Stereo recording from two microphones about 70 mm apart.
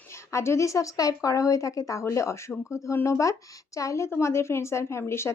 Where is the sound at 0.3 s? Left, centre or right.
Left.